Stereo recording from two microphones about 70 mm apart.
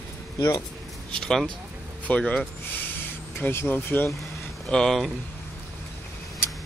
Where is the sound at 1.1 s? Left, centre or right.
Centre.